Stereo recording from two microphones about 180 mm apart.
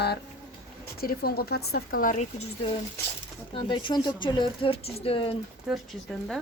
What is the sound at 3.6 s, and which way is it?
Speech, 25° left (ahead or behind).